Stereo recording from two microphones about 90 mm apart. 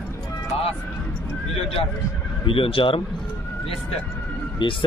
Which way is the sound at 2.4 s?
80° left.